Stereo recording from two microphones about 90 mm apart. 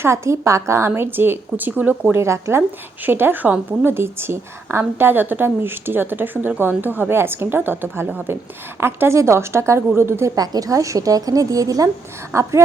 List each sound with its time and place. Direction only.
0.0 s a woman's voice: 30° right (ahead or behind)
2.1 s a woman's voice: 30° right (ahead or behind)
10.3 s a woman's voice: 45° right (ahead or behind)